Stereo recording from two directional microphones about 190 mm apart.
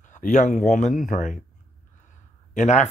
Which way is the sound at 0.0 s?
40° left (ahead or behind).